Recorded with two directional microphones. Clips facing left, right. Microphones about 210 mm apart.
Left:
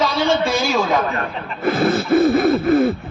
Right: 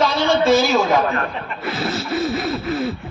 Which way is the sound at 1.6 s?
50° left (ahead or behind).